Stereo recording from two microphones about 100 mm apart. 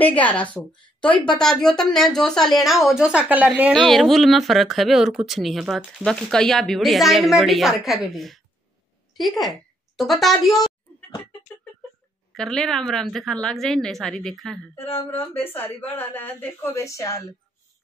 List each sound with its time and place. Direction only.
0.0 s a woman's voice: 15° left (ahead or behind); by 3.7 s 15° right (ahead or behind)
3.7 s a woman's voice: centre (ahead or behind)
12.4 s speech: 5° left (ahead or behind)
15.0 s speech: 20° left (ahead or behind)